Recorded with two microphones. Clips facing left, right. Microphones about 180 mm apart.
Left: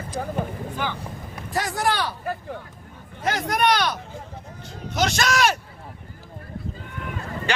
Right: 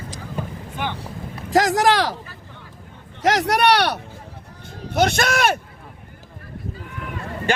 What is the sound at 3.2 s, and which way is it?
Speech, 85° right.